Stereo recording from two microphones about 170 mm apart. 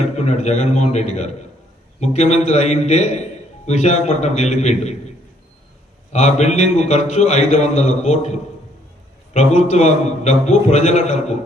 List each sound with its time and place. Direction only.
0.2 s a man's voice: 40° left (ahead or behind)
6.1 s a man's voice: 40° left (ahead or behind)